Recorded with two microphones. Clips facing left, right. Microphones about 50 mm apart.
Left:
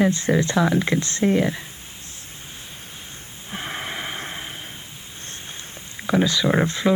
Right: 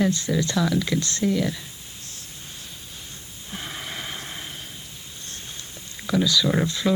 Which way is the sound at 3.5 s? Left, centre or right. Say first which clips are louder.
Left 4 dB; left.